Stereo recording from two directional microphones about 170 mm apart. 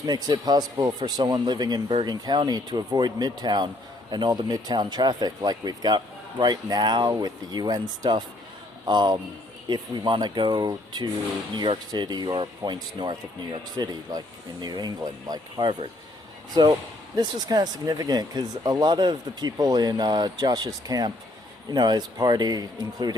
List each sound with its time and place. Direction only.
0.0 s speech: 25° right (ahead or behind)
17.2 s speech: 25° right (ahead or behind)